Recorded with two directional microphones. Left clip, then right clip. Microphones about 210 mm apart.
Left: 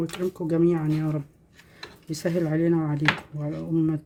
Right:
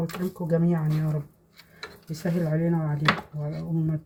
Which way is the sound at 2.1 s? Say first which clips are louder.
Left 4 dB; 60° left (ahead or behind).